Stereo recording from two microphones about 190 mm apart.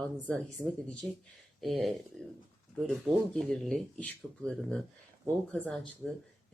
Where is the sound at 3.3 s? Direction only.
5° left (ahead or behind).